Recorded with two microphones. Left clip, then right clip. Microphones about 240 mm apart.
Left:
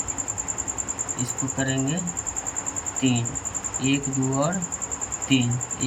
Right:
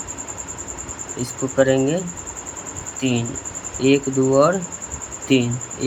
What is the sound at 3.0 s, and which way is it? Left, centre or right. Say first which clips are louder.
Speech: right 3 dB; centre.